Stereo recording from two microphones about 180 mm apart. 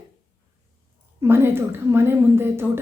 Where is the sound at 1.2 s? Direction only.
15° right (ahead or behind).